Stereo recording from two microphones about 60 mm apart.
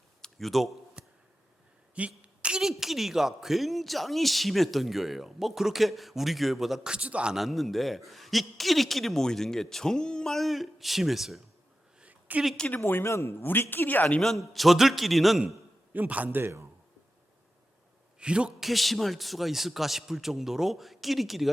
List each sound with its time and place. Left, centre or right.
0.2 s a sound: centre
1.0 s a sound: centre
2.6 s speech: centre
6.9 s a man's voice: centre
7.3 s speech: centre
11.9 s a sound: right
12.7 s speech: left
13.1 s a man's voice: left
13.4 s speech: left
14.2 s speech: centre
15.9 s a man's voice: right
18.2 s a man's voice: centre
18.6 s speech: centre